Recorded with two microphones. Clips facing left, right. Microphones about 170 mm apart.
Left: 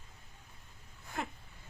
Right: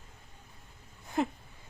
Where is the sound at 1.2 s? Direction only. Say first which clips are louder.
Right 10 dB; 20° right (ahead or behind).